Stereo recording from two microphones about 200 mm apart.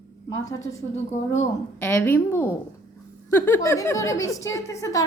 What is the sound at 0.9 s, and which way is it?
Speech, 35° left (ahead or behind).